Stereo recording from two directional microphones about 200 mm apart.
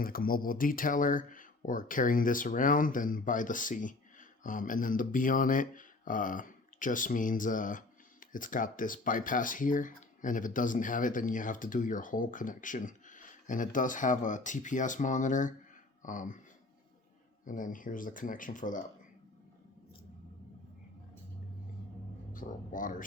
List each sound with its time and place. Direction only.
0.0 s speech: 45° left (ahead or behind)
17.4 s speech: 40° left (ahead or behind)
22.3 s speech: 40° left (ahead or behind)